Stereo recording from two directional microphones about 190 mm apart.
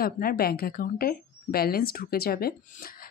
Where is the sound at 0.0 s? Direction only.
50° left (ahead or behind).